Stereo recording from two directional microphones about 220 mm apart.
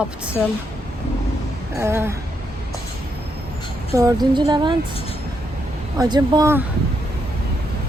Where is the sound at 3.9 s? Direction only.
15° right (ahead or behind).